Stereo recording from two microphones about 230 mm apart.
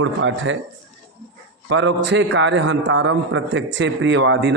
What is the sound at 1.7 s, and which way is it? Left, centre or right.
A man's voice, right.